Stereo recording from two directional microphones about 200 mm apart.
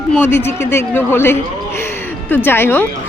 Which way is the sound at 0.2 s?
10° left (ahead or behind).